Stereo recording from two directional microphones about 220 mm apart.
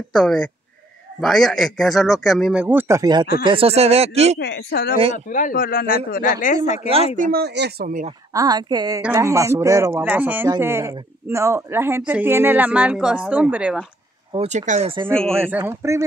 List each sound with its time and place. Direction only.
0.1 s a man's voice: 5° left (ahead or behind); by 4.4 s 30° right (ahead or behind)
4.4 s speech: 50° left (ahead or behind); by 6.9 s 30° left (ahead or behind)
7.2 s speech: 40° right (ahead or behind)
8.3 s a man's voice: 15° right (ahead or behind)
14.3 s speech: 30° right (ahead or behind)
15.4 s a man's voice: 10° right (ahead or behind)